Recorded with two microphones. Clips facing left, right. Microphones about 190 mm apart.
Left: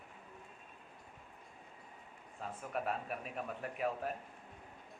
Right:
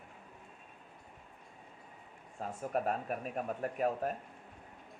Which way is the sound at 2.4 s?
40° right (ahead or behind).